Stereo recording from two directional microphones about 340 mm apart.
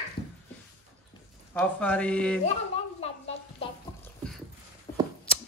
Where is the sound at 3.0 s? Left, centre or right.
Centre.